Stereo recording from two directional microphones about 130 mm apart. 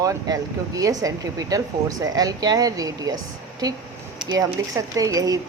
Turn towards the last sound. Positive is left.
turn(degrees=-25)  # may be behind; listen again after turning